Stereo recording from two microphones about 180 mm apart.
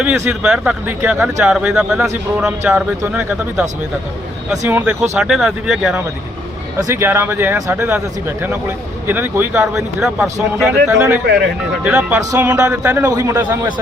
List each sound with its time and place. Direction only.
0.0 s speech: 5° right (ahead or behind)
6.7 s speech: 15° right (ahead or behind)
11.3 s speech: 65° right (ahead or behind)
11.8 s speech: 5° right (ahead or behind)